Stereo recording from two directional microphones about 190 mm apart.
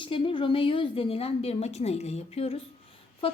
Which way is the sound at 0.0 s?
30° left (ahead or behind).